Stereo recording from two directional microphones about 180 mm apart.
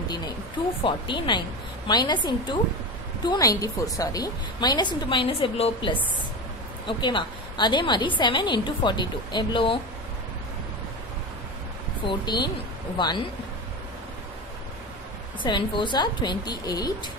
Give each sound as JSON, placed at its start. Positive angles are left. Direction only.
{"t": 0.8, "sound": "a woman's voice", "side_deg": 25}
{"t": 12.1, "sound": "a woman's voice", "side_deg": 25}
{"t": 15.4, "sound": "a woman's voice", "side_deg": 25}